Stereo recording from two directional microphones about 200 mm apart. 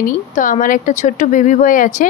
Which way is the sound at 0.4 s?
40° left (ahead or behind).